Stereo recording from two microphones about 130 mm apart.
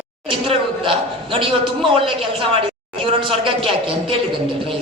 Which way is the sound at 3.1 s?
40° right (ahead or behind).